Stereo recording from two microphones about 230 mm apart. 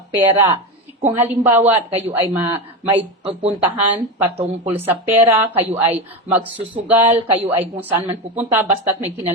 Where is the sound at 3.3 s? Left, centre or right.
Right.